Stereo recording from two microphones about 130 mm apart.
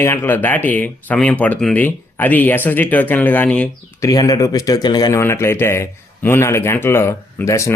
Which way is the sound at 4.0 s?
25° left (ahead or behind).